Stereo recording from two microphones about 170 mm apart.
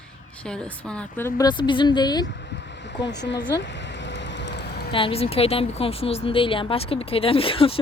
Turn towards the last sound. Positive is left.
turn(degrees=35)  # may be behind; listen again after turning